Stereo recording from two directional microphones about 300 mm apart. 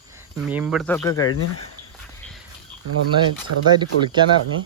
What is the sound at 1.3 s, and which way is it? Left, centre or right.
Speech, left.